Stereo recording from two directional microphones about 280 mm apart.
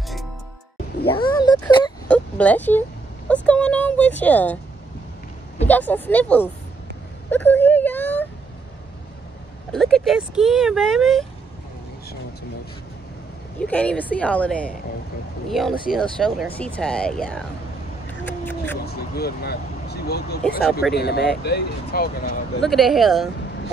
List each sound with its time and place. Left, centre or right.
1.1 s a sound: centre
2.0 s fowl: centre
3.4 s speech: centre
5.7 s speech: centre
7.2 s wail: centre
9.7 s speech: centre
13.6 s speech: centre
18.2 s a sound: centre
18.9 s speech: left
22.6 s speech: centre